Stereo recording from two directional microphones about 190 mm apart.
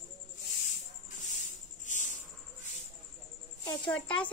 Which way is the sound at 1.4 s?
40° left (ahead or behind).